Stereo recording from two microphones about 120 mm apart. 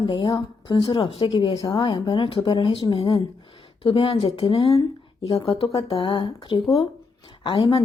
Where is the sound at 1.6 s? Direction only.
40° left (ahead or behind).